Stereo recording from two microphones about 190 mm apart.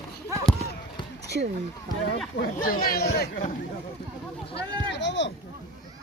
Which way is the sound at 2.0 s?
55° left (ahead or behind).